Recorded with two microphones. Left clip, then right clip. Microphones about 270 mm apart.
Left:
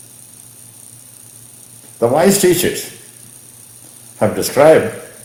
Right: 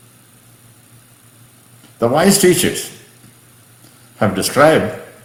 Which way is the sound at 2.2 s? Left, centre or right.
Centre.